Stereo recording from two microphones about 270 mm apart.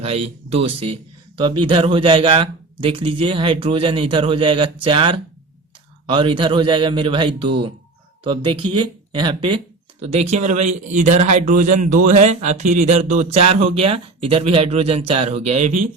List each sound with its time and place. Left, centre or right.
0.0 s a man's voice: right